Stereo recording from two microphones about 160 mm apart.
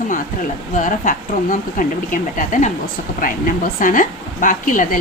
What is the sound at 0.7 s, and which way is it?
A woman's voice, 55° left (ahead or behind).